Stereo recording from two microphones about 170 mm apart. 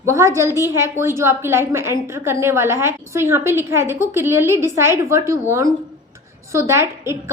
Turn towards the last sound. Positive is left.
turn(degrees=-15)  # may be behind; listen again after turning